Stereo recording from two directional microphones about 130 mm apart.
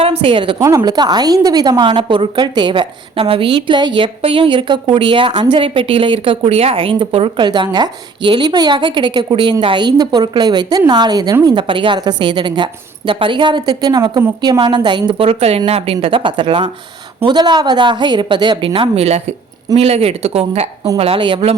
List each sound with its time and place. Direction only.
0.0 s a woman's voice: 50° right (ahead or behind)
0.6 s a woman's voice: 25° right (ahead or behind); by 21.5 s 40° right (ahead or behind)